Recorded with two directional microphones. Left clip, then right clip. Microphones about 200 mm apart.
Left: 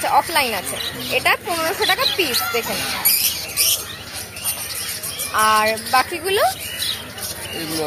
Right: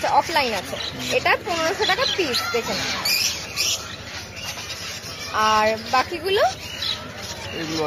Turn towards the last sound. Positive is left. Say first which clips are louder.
# left 2 dB
turn(degrees=-5)  # may be behind; listen again after turning